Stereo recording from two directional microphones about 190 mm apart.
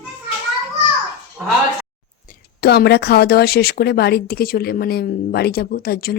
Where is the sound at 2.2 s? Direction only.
55° left (ahead or behind).